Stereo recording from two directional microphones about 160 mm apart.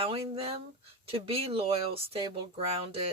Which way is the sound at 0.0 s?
35° right (ahead or behind).